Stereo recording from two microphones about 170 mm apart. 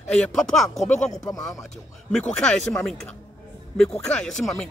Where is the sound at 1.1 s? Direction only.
20° left (ahead or behind).